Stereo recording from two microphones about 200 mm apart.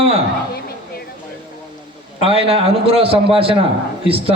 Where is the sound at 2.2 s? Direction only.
30° right (ahead or behind).